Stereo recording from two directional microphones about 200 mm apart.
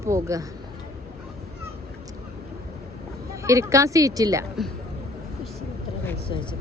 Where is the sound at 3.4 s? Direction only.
15° right (ahead or behind).